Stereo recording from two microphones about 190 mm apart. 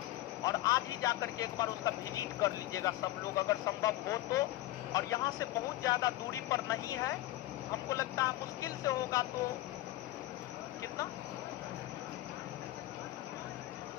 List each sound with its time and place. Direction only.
0.4 s speech: 20° left (ahead or behind)